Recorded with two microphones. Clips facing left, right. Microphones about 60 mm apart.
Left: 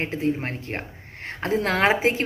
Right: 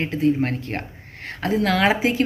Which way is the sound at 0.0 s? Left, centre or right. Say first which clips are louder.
Right 5 dB; left.